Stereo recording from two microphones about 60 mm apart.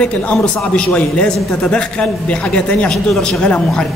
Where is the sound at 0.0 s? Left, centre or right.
Left.